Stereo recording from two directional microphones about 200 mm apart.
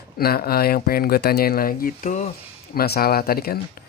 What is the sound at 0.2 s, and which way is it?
Speech, 50° left (ahead or behind).